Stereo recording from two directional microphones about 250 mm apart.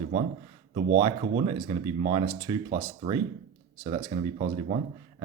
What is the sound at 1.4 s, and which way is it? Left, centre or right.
Speech, centre.